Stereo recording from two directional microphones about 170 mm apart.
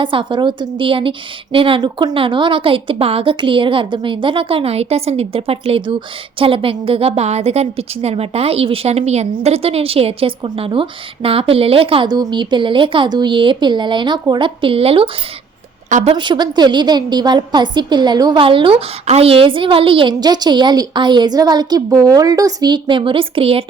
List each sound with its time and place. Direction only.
0.0 s a woman's voice: 30° right (ahead or behind)
15.9 s a woman's voice: 45° right (ahead or behind)
16.1 s a woman's voice: 25° right (ahead or behind)